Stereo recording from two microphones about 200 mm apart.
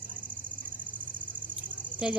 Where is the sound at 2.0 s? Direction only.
5° right (ahead or behind).